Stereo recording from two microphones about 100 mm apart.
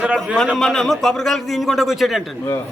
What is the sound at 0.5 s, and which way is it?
A man's voice, 5° left (ahead or behind).